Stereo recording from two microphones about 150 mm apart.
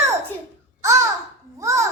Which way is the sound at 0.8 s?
20° right (ahead or behind).